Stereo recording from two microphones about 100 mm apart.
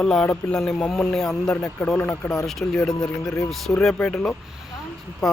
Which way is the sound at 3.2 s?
35° left (ahead or behind).